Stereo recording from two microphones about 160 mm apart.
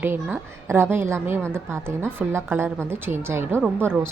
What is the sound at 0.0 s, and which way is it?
A woman's voice, 10° right (ahead or behind).